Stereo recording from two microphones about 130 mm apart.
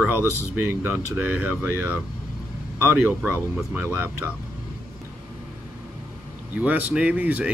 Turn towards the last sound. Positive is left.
turn(degrees=-15)  # may be behind; listen again after turning